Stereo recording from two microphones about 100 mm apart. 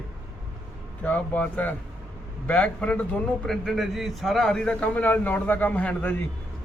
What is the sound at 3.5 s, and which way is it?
A man's voice, centre (ahead or behind).